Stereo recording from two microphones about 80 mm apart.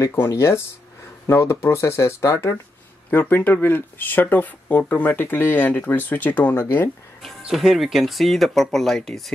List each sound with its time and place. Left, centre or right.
0.0 s speech: left
3.1 s speech: left
7.4 s speech: centre